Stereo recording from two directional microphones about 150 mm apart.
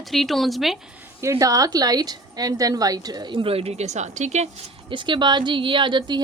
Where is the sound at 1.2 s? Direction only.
20° right (ahead or behind); by 4.6 s 50° right (ahead or behind).